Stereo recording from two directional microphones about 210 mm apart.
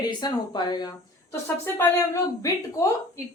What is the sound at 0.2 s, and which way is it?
A woman's voice, 20° left (ahead or behind).